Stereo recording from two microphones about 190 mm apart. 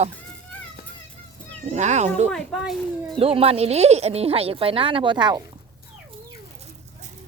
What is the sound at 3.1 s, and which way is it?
Speech, 30° right (ahead or behind).